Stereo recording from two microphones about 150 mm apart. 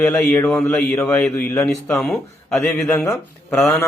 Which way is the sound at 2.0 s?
Centre (ahead or behind).